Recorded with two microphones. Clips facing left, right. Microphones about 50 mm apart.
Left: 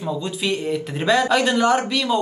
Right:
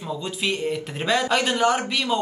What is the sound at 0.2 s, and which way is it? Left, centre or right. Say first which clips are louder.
Speech: left 2 dB; centre.